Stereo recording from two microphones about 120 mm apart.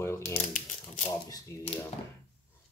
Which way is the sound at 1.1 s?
30° left (ahead or behind).